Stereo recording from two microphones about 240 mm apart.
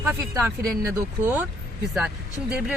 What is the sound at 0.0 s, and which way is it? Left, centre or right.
Speech, centre.